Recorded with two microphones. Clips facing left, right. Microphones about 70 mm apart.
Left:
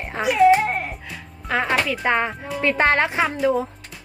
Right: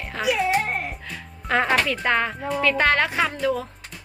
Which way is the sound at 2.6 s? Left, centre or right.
Left.